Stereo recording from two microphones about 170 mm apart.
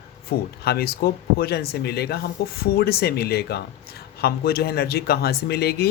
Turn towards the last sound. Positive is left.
turn(degrees=70)  # may be behind; listen again after turning